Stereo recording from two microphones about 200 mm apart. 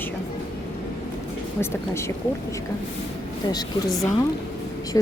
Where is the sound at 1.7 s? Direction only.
15° left (ahead or behind).